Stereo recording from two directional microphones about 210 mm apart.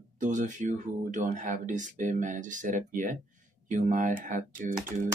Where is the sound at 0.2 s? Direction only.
35° right (ahead or behind).